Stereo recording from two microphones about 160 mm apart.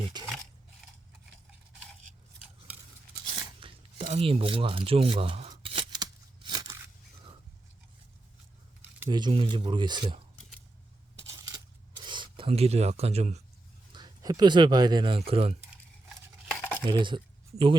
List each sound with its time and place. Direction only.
0.1 s speech: 25° right (ahead or behind)
3.6 s speech: 35° right (ahead or behind)
5.6 s scissors: 35° right (ahead or behind)
9.0 s speech: 30° right (ahead or behind)
12.0 s speech: 30° right (ahead or behind)
13.9 s speech: 25° right (ahead or behind)
16.8 s speech: 30° right (ahead or behind)